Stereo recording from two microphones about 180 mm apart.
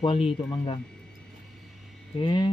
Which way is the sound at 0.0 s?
30° left (ahead or behind).